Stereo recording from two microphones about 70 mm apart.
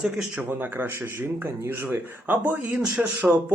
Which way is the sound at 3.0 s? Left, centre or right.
Centre.